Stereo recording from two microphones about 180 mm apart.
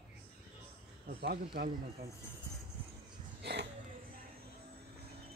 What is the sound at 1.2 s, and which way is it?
Speech, 55° right (ahead or behind).